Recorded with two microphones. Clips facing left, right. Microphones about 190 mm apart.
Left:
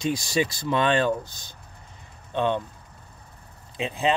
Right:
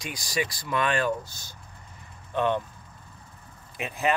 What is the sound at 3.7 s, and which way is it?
Speech, 25° left (ahead or behind).